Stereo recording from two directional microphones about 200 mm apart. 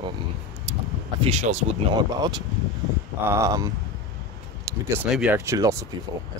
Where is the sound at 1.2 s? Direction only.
35° right (ahead or behind).